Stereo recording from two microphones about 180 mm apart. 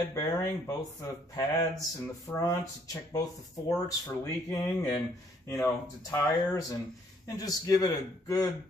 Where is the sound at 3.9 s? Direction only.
20° left (ahead or behind).